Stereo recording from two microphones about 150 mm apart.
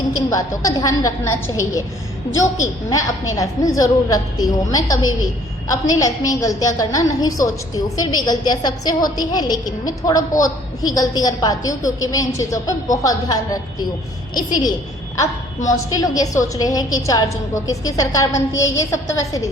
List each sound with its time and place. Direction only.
0.3 s a woman's voice: 25° left (ahead or behind)